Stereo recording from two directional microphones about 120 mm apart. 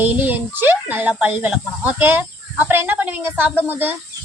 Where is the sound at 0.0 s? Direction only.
15° right (ahead or behind).